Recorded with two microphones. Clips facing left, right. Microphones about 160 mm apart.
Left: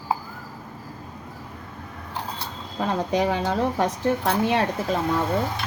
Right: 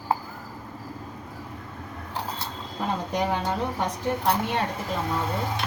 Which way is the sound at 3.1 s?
90° left.